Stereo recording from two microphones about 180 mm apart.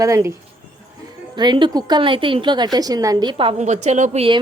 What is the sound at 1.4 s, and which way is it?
A woman's voice, 25° right (ahead or behind).